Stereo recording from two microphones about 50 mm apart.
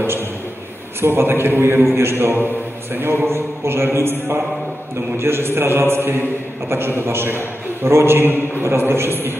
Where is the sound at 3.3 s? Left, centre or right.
Right.